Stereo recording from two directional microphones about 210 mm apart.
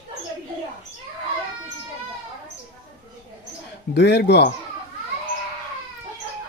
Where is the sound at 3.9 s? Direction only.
50° left (ahead or behind).